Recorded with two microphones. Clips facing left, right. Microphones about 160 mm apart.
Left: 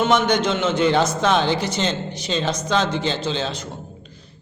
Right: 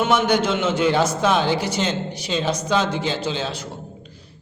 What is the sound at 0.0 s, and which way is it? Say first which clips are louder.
A man's voice: even; 10° right (ahead or behind).